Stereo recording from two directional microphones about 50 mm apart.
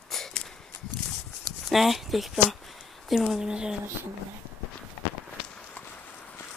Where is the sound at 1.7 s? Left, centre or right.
Centre.